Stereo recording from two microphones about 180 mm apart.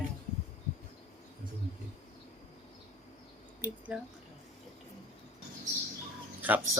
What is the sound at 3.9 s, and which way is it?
Speech, 5° right (ahead or behind).